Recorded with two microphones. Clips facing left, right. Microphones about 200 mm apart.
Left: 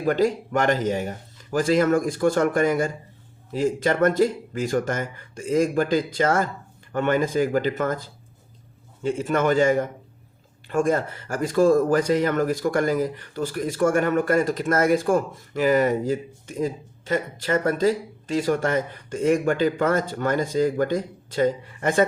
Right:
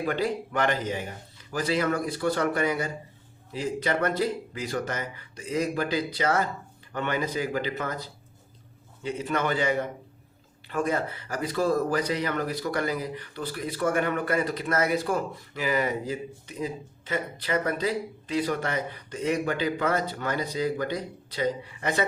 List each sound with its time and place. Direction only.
0.0 s speech: 45° left (ahead or behind)